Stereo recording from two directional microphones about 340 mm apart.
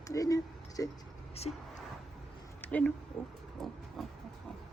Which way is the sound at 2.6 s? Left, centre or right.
Centre.